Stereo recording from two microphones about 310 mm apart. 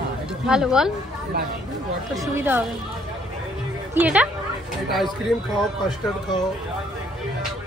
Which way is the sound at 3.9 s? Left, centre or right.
Centre.